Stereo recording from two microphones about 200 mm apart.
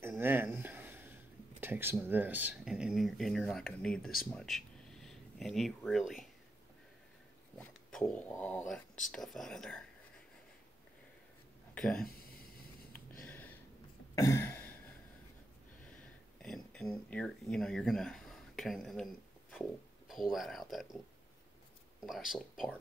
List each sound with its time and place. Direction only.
0.1 s a sound: 10° right (ahead or behind)
2.0 s speech: 10° right (ahead or behind)
7.5 s speech: 5° left (ahead or behind)
11.7 s speech: 5° left (ahead or behind)
12.1 s a sound: 50° left (ahead or behind)
13.2 s a sound: 10° left (ahead or behind)
16.4 s speech: centre (ahead or behind)
20.1 s speech: centre (ahead or behind)
22.0 s speech: centre (ahead or behind)